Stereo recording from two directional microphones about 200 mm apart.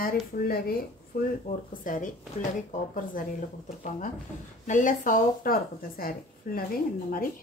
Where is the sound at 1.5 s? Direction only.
35° left (ahead or behind).